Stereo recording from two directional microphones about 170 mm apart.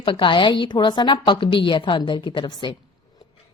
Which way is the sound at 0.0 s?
30° left (ahead or behind).